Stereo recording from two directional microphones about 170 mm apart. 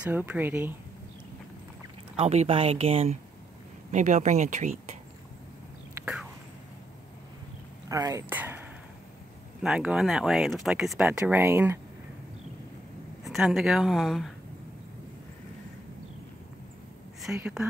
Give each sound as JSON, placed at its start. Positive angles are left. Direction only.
{"t": 0.0, "sound": "speech", "side_deg": -10}
{"t": 2.1, "sound": "speech", "side_deg": -35}
{"t": 3.9, "sound": "speech", "side_deg": -45}
{"t": 7.9, "sound": "speech", "side_deg": -20}
{"t": 13.2, "sound": "speech", "side_deg": 0}
{"t": 17.2, "sound": "speech", "side_deg": -5}